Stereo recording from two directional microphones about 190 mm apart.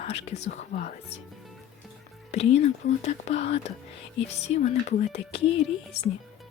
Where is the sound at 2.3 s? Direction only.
35° left (ahead or behind).